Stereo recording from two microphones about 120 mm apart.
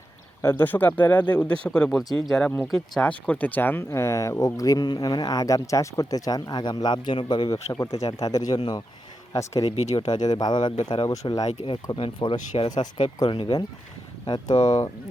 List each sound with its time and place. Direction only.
0.4 s speech: 15° left (ahead or behind); by 8.8 s 35° left (ahead or behind)
9.3 s speech: 25° left (ahead or behind)
9.7 s speech: 65° left (ahead or behind)
10.2 s speech: 35° left (ahead or behind)
11.1 s speech: 30° left (ahead or behind)
11.6 s speech: 45° left (ahead or behind)
12.5 s speech: 40° left (ahead or behind)
13.2 s speech: 45° left (ahead or behind)
14.3 s speech: 35° left (ahead or behind)